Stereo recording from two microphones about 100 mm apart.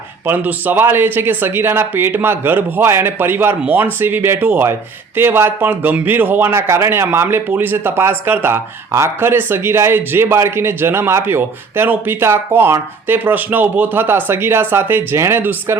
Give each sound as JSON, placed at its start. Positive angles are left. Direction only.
{"t": 0.3, "sound": "a man's voice", "side_deg": -20}